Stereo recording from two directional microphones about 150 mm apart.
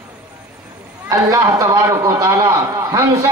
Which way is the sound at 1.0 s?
20° right (ahead or behind).